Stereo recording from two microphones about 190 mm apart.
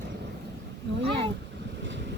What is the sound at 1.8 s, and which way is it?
Boat, 70° right (ahead or behind).